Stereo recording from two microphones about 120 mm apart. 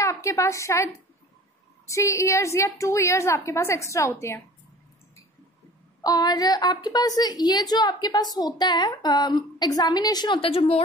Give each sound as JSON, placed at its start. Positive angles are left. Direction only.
{"t": 0.0, "sound": "a woman's voice", "side_deg": 25}
{"t": 1.9, "sound": "a woman's voice", "side_deg": 25}
{"t": 6.0, "sound": "a woman's voice", "side_deg": 35}